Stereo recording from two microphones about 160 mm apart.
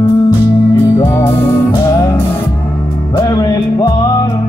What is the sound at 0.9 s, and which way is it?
Music, 15° left (ahead or behind).